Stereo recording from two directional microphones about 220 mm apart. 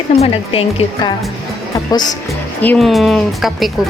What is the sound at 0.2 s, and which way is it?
Speech, 25° left (ahead or behind).